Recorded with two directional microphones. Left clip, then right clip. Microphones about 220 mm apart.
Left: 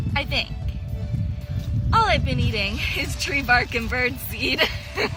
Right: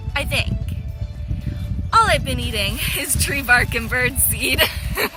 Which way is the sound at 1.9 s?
5° right (ahead or behind).